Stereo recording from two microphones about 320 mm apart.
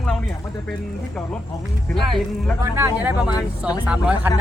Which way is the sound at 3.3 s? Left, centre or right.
Centre.